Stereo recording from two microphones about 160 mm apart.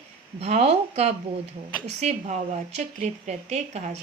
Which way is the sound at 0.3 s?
40° right (ahead or behind).